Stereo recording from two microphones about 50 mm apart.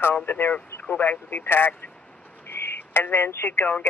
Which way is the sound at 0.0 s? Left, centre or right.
Left.